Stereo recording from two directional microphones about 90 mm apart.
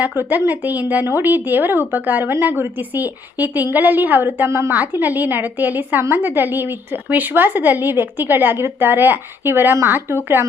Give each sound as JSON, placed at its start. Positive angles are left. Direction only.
{"t": 0.0, "sound": "a woman's voice", "side_deg": -20}